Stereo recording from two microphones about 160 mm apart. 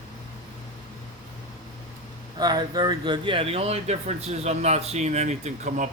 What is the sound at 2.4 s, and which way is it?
Speech, 25° right (ahead or behind).